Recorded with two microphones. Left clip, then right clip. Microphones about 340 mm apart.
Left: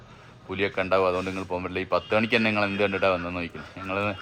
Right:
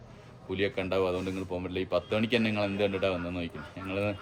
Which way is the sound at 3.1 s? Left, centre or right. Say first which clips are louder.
Left 6 dB; left.